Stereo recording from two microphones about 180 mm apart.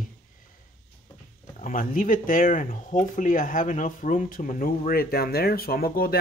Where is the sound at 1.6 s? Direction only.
45° left (ahead or behind).